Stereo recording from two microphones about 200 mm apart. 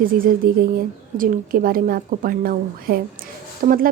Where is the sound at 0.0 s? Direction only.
45° right (ahead or behind).